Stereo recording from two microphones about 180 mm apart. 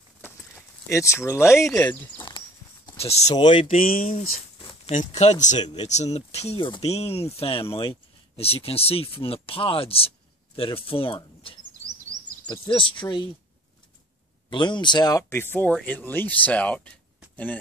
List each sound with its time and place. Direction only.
0.2 s a sound: 15° left (ahead or behind)
1.7 s speech: 10° left (ahead or behind)
2.1 s walk: 25° left (ahead or behind)
3.0 s speech: 35° left (ahead or behind)
3.8 s speech: 50° left (ahead or behind)
4.6 s a sound: 30° left (ahead or behind)
4.9 s speech: 40° left (ahead or behind)
14.5 s speech: 25° left (ahead or behind); by 16.9 s 5° left (ahead or behind)